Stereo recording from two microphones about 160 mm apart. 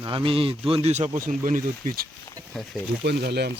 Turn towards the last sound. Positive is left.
turn(degrees=-90)